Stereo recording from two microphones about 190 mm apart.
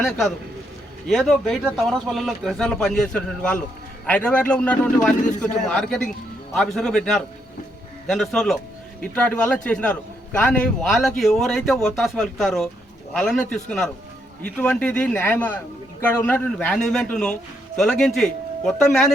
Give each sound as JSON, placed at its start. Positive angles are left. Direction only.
{"t": 0.0, "sound": "a man's voice", "side_deg": 5}